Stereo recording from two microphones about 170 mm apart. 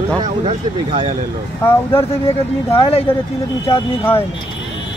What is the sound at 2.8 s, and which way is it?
Speech, 35° left (ahead or behind).